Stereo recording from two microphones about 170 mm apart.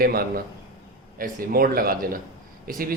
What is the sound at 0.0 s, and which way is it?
Speech, 60° right (ahead or behind).